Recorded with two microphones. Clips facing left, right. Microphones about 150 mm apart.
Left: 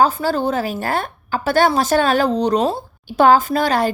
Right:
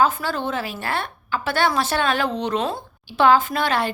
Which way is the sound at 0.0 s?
35° left (ahead or behind).